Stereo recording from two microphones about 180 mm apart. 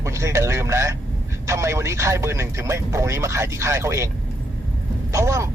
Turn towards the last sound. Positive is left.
turn(degrees=-15)  # may be behind; listen again after turning